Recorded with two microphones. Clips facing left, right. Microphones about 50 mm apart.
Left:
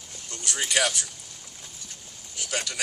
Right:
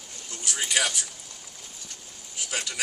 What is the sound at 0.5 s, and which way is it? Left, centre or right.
Speech, centre.